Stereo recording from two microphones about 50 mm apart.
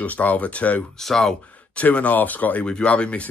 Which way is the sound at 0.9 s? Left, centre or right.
Centre.